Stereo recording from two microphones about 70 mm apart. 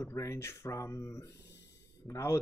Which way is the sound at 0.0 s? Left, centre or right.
Left.